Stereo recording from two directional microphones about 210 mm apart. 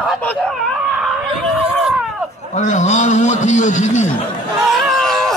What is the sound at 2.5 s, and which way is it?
A man's voice, 35° left (ahead or behind).